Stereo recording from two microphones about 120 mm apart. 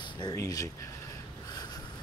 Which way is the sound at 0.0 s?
35° left (ahead or behind).